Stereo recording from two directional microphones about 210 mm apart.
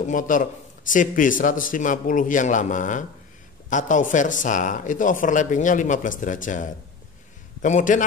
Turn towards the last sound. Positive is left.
turn(degrees=35)  # may be behind; listen again after turning